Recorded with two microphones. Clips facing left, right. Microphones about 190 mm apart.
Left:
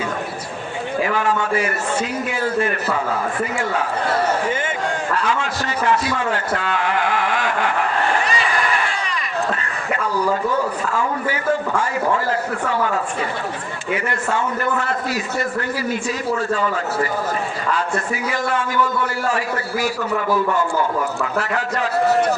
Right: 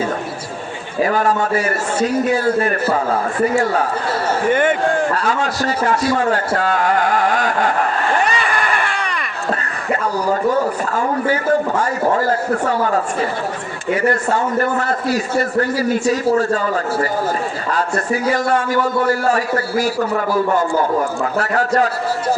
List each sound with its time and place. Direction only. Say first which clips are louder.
1.0 s a man's voice: right 5 dB; 40° right (ahead or behind)
5.1 s a man's voice: right 3 dB; 40° right (ahead or behind)
6.6 s a sound: right 5 dB; 40° right (ahead or behind)
8.2 s a sound: right 2 dB; 60° right (ahead or behind)
11.8 s a man's voice: right 3 dB; 40° right (ahead or behind)
13.9 s a man's voice: right 5 dB; 40° right (ahead or behind)
18.3 s a man's voice: right 5 dB; 40° right (ahead or behind)
21.3 s a man's voice: right 8 dB; 40° right (ahead or behind)